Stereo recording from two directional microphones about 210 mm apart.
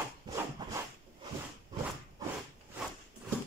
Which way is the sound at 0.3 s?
20° right (ahead or behind).